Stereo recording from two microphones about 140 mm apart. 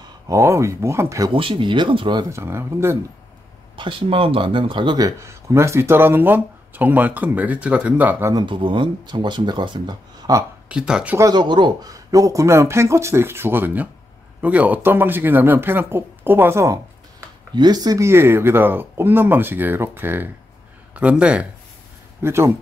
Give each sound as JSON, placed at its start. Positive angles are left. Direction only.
{"t": 0.3, "sound": "speech", "side_deg": -20}
{"t": 1.3, "sound": "speech", "side_deg": -40}
{"t": 2.2, "sound": "speech", "side_deg": -20}
{"t": 3.7, "sound": "speech", "side_deg": -40}
{"t": 8.4, "sound": "speech", "side_deg": -35}
{"t": 10.7, "sound": "speech", "side_deg": -5}
{"t": 11.1, "sound": "speech", "side_deg": -30}